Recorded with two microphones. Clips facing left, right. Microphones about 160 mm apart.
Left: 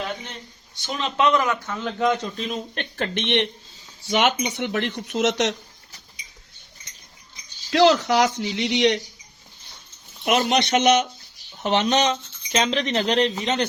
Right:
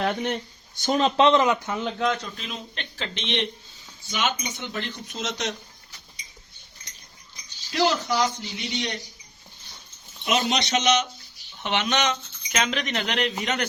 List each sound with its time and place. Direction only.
0.0 s speech: 60° right (ahead or behind)
0.8 s speech: 40° right (ahead or behind)
1.1 s a man's voice: 25° right (ahead or behind)
2.7 s speech: 55° left (ahead or behind)
4.1 s speech: 70° left (ahead or behind)
7.7 s speech: 85° left
10.4 s speech: 55° left (ahead or behind)
11.6 s speech: 35° left (ahead or behind)